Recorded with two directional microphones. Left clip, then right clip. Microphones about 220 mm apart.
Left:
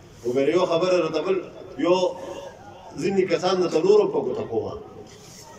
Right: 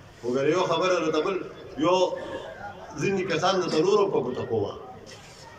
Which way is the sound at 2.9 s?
35° left (ahead or behind).